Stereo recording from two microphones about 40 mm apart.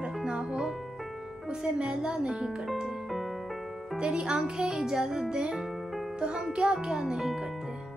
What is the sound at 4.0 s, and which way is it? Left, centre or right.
Music, right.